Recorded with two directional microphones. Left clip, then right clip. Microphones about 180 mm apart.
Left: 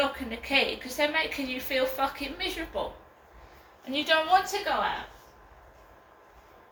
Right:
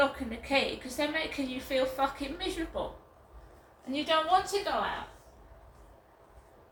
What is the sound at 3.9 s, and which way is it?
Speech, 20° right (ahead or behind).